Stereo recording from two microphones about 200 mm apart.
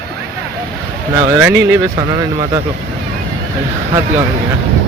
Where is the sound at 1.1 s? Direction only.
25° right (ahead or behind).